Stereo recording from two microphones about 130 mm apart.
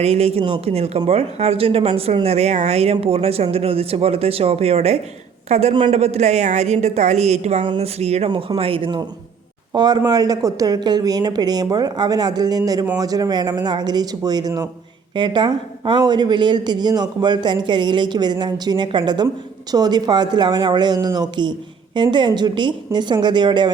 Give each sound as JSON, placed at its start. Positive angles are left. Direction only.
{"t": 0.0, "sound": "a woman's voice", "side_deg": -50}
{"t": 8.3, "sound": "a woman's voice", "side_deg": -40}